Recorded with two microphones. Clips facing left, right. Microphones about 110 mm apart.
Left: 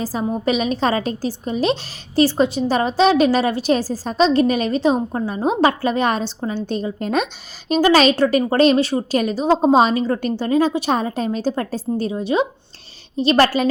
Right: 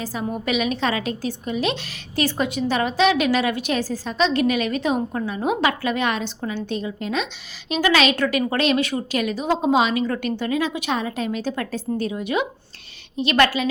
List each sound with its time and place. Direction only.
0.0 s a woman's voice: 35° left (ahead or behind)